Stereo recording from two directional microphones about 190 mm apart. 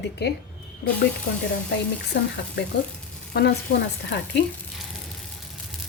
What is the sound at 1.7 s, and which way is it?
Speech, 60° left (ahead or behind).